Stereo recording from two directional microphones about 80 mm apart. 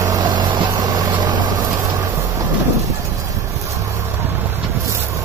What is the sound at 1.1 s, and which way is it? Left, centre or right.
Vehicle, right.